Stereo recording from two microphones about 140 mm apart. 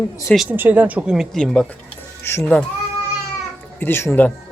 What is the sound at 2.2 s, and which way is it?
Speech, 15° left (ahead or behind).